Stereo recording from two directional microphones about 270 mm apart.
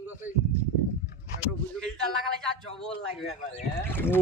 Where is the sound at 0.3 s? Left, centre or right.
Left.